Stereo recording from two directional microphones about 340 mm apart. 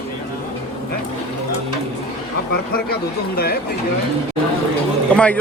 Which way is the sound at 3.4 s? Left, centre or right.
Left.